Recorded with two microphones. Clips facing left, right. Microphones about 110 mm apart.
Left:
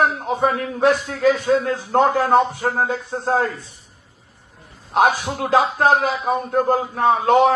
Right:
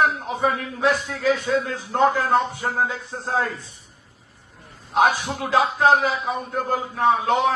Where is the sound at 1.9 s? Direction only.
50° left (ahead or behind).